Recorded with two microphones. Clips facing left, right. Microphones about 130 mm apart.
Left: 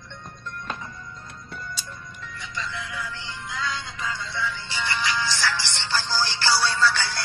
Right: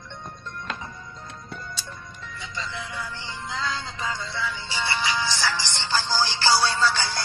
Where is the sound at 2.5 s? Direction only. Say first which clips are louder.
Left 1 dB; 25° right (ahead or behind).